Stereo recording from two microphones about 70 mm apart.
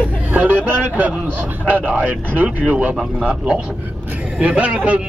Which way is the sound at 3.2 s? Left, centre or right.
Centre.